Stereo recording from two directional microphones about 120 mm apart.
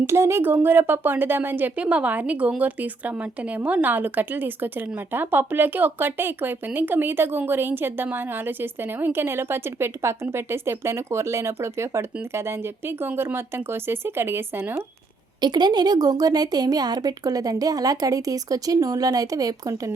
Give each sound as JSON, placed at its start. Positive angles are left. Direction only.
{"t": 0.1, "sound": "speech", "side_deg": -20}
{"t": 15.4, "sound": "a woman's voice", "side_deg": -35}